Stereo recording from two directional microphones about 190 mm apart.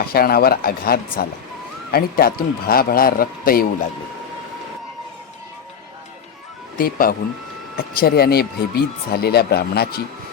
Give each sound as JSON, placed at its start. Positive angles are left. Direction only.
{"t": 0.0, "sound": "speech", "side_deg": 50}
{"t": 6.7, "sound": "speech", "side_deg": 50}